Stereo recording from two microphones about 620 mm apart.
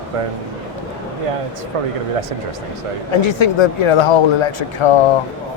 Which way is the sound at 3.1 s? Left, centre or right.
Left.